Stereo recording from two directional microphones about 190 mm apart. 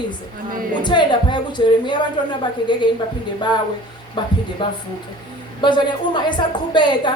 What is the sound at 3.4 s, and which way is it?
Speech, 25° left (ahead or behind).